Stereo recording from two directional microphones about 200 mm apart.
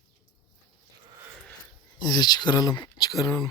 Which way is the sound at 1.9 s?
20° left (ahead or behind).